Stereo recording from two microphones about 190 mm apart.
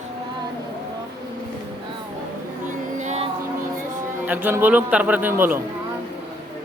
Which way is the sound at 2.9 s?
35° right (ahead or behind).